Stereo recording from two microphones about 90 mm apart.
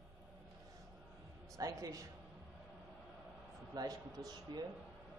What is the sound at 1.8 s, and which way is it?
Speech, 40° right (ahead or behind).